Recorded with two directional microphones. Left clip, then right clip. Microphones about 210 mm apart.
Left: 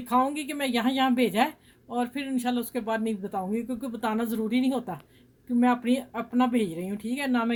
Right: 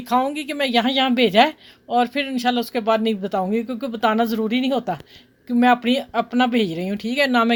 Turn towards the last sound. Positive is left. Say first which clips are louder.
# right 10 dB
turn(degrees=-50)  # may be behind; listen again after turning